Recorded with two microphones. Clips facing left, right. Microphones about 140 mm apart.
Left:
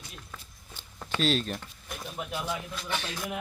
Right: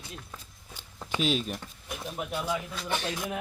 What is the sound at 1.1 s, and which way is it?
Speech, 10° right (ahead or behind).